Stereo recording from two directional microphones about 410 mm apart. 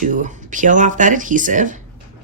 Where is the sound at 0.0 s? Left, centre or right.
Centre.